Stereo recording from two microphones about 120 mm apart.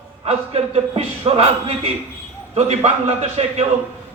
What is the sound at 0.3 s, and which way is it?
A man's voice, 55° right (ahead or behind).